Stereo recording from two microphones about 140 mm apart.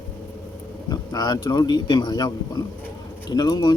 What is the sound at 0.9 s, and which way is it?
A man's voice, 25° left (ahead or behind).